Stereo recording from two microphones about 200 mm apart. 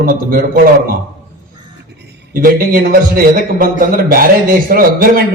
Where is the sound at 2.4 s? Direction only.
45° right (ahead or behind).